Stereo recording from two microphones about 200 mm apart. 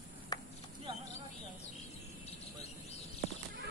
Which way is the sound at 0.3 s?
20° left (ahead or behind).